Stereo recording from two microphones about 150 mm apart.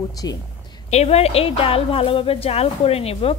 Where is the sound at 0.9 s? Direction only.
45° left (ahead or behind).